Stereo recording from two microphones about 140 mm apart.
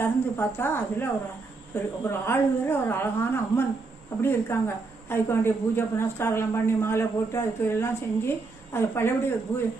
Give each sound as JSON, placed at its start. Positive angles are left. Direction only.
{"t": 0.0, "sound": "a woman's voice", "side_deg": 15}